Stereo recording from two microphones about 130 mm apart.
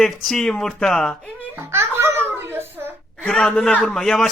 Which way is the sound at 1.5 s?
20° right (ahead or behind).